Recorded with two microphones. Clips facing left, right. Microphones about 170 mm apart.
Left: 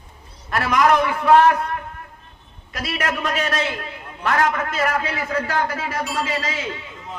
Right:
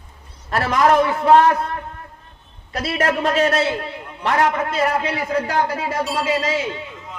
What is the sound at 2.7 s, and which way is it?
A man's voice, 35° right (ahead or behind).